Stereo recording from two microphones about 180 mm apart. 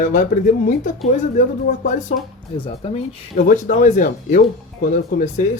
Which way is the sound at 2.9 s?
45° left (ahead or behind).